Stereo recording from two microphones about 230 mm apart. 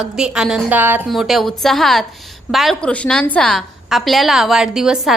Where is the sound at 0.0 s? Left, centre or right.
Centre.